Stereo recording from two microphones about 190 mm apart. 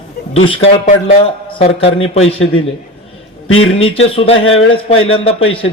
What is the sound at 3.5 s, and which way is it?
Speech, 90° left.